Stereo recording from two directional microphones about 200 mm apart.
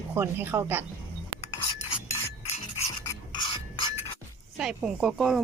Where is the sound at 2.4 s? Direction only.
35° left (ahead or behind).